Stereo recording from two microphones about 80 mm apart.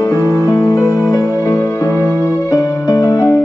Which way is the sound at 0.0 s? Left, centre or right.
Left.